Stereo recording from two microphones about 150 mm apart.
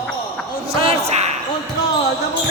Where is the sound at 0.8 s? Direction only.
45° right (ahead or behind).